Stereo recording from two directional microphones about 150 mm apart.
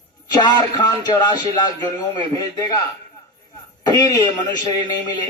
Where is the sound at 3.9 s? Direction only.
25° left (ahead or behind).